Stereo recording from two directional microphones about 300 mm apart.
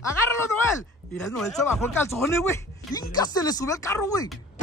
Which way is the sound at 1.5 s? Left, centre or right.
Centre.